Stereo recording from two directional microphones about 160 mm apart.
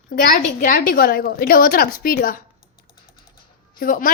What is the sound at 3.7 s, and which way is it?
Speech, 60° left (ahead or behind).